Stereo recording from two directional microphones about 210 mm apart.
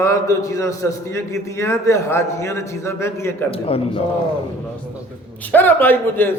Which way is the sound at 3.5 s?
25° left (ahead or behind).